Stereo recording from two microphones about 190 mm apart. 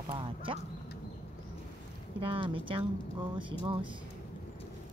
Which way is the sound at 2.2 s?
25° right (ahead or behind).